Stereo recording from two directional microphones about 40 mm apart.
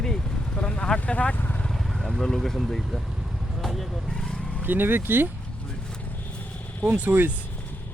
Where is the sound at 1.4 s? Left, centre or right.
Left.